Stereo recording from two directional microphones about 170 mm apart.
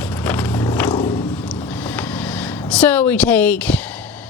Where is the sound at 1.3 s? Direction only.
5° left (ahead or behind).